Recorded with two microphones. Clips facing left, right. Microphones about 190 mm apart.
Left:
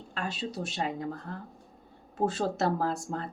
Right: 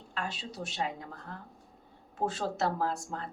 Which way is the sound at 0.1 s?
35° left (ahead or behind).